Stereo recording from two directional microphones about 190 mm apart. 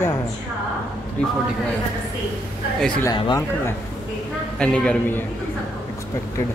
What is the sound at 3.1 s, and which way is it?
Speech, 25° left (ahead or behind).